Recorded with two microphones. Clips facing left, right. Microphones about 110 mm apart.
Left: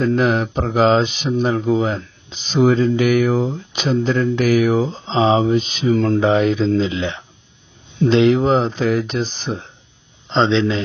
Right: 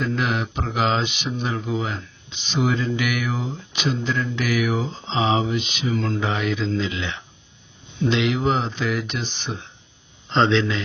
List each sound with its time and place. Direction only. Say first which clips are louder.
0.0 s speech: left 7 dB; 40° left (ahead or behind)
10.2 s a man's voice: left 3 dB; 20° left (ahead or behind)